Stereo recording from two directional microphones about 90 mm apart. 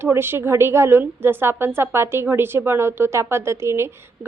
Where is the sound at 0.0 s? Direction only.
25° right (ahead or behind).